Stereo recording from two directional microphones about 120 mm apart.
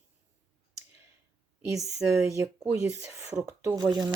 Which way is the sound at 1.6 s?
25° right (ahead or behind).